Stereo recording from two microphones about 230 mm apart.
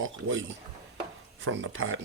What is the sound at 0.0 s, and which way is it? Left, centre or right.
Speech, right.